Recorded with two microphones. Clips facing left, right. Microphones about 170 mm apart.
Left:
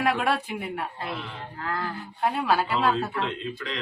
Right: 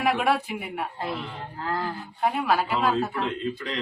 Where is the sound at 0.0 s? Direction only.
5° right (ahead or behind).